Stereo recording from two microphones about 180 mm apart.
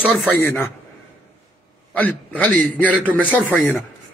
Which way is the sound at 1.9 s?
10° left (ahead or behind).